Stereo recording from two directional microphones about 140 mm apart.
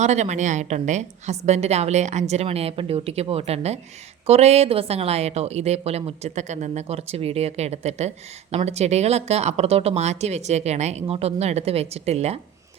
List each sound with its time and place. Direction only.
0.0 s speech: 55° right (ahead or behind)